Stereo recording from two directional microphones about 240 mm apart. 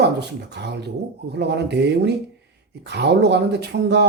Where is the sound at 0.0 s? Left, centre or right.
Right.